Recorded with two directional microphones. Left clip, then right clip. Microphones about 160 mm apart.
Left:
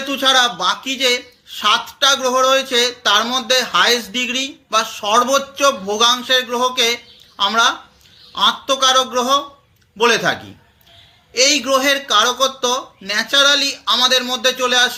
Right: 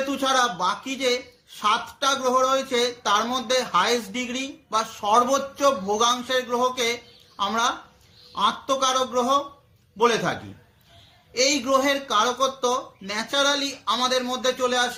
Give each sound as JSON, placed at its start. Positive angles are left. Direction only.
{"t": 0.1, "sound": "speech", "side_deg": -20}
{"t": 11.3, "sound": "speech", "side_deg": -20}